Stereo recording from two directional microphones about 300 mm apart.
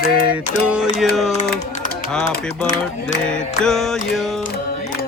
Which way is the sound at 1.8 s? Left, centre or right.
Left.